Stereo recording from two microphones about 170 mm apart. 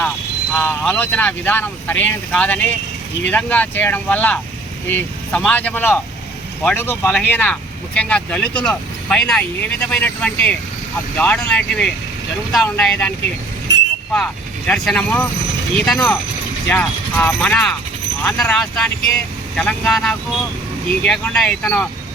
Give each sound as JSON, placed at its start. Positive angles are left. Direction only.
{"t": 0.5, "sound": "speech", "side_deg": 10}
{"t": 13.7, "sound": "vehicle", "side_deg": 90}
{"t": 14.7, "sound": "speech", "side_deg": 5}